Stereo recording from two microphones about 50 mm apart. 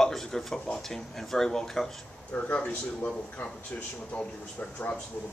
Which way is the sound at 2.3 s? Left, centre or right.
Left.